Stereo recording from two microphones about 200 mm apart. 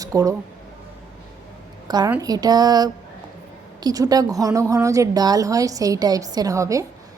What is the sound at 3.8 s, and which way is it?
A woman's voice, 20° right (ahead or behind).